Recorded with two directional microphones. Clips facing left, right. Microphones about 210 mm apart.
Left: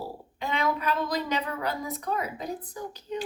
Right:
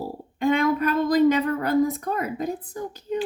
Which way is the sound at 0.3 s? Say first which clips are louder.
Right 8 dB; 50° right (ahead or behind).